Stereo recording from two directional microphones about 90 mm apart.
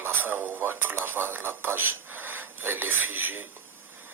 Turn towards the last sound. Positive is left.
turn(degrees=-20)  # may be behind; listen again after turning